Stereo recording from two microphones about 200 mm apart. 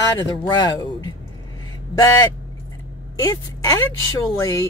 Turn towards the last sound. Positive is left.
turn(degrees=15)  # may be behind; listen again after turning